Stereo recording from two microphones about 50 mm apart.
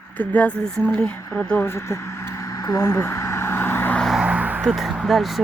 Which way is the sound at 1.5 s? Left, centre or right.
Left.